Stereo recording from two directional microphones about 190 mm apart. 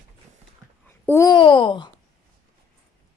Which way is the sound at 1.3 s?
25° left (ahead or behind).